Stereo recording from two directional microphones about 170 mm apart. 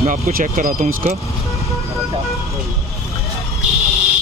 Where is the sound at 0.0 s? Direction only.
55° right (ahead or behind).